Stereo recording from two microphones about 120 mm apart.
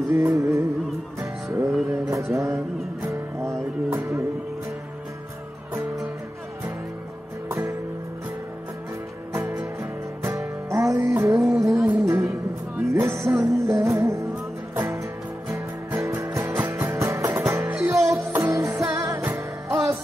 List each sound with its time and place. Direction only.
0.1 s music: 25° right (ahead or behind)
7.4 s music: 25° right (ahead or behind)
9.3 s music: 20° right (ahead or behind)
11.3 s music: 5° right (ahead or behind)
11.6 s music: 25° right (ahead or behind)
15.4 s music: 25° right (ahead or behind)